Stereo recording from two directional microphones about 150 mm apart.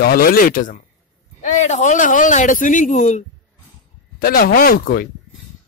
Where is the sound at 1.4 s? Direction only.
50° left (ahead or behind).